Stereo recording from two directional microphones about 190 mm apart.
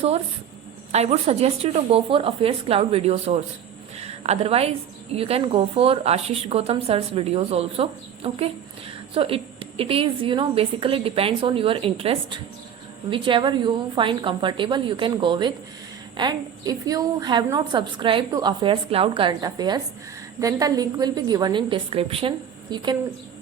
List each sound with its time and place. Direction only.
0.9 s a woman's voice: 35° right (ahead or behind)